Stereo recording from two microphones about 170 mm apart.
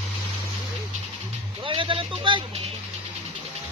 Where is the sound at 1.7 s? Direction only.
30° right (ahead or behind).